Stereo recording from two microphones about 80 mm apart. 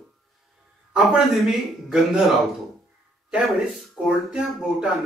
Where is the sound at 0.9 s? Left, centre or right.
Centre.